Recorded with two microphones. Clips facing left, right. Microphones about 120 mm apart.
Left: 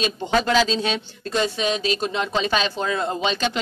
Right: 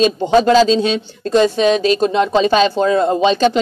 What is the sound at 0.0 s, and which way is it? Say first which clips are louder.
Speech: right 10 dB; 35° right (ahead or behind).